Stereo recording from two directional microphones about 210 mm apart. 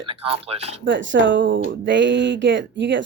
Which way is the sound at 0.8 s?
60° right (ahead or behind).